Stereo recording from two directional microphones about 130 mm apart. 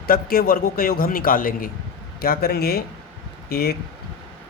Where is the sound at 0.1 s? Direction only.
90° left.